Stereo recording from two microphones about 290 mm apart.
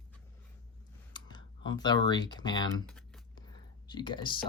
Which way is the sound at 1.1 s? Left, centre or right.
Centre.